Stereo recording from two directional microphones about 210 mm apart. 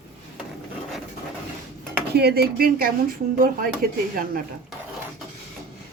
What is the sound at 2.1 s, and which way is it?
Speech, 50° right (ahead or behind).